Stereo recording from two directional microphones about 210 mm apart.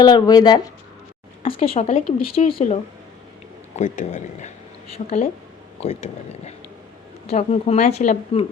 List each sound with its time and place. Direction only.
0.0 s speech: 20° left (ahead or behind)